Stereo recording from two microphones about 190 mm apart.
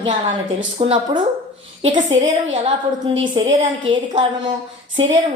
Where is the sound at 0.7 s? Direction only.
30° right (ahead or behind).